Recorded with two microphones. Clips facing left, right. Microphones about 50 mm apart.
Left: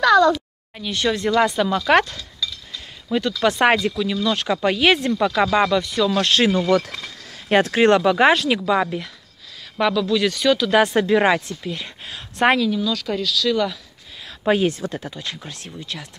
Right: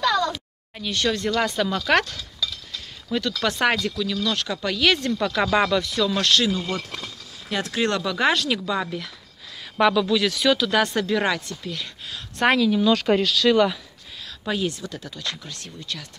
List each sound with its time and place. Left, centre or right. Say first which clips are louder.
0.7 s speech: left 2 dB; centre
6.5 s speech: left 9 dB; left
7.6 s speech: left 7 dB; left
9.8 s speech: even; centre
10.7 s speech: left 5 dB; centre
12.4 s speech: left 1 dB; centre
12.8 s speech: right 4 dB; right
13.5 s speech: right 3 dB; centre
14.2 s speech: left 7 dB; left; by 16.1 s centre